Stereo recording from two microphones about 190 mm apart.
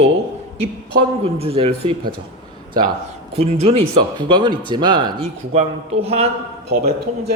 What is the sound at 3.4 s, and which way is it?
Speech, 35° right (ahead or behind).